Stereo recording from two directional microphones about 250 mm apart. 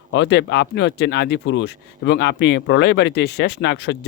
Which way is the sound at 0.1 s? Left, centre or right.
Left.